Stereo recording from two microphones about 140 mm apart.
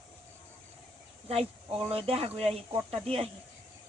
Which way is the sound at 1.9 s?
45° right (ahead or behind).